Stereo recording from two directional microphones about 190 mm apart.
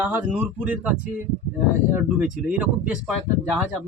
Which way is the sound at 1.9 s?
5° right (ahead or behind).